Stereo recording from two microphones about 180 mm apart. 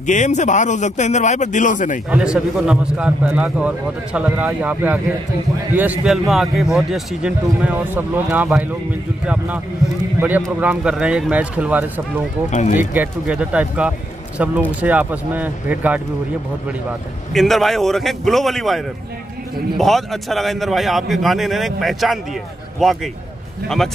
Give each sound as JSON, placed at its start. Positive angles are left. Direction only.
{"t": 0.0, "sound": "speech", "side_deg": 40}
{"t": 2.0, "sound": "a man's voice", "side_deg": -5}
{"t": 10.6, "sound": "a man's voice", "side_deg": -5}
{"t": 12.4, "sound": "speech", "side_deg": 40}
{"t": 12.7, "sound": "a man's voice", "side_deg": -10}
{"t": 17.3, "sound": "a man's voice", "side_deg": 0}
{"t": 19.8, "sound": "a man's voice", "side_deg": 0}